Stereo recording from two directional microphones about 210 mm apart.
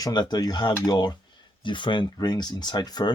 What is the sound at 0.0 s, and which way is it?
Speech, 20° left (ahead or behind).